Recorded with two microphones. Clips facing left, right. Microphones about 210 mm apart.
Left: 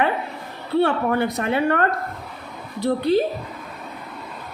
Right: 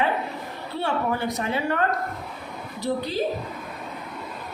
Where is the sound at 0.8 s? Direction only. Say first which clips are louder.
Left 6 dB; 60° left (ahead or behind).